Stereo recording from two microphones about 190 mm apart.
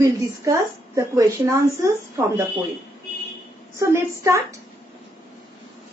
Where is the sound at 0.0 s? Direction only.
15° right (ahead or behind).